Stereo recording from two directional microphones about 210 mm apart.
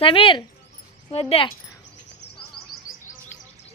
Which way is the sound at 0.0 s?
25° left (ahead or behind).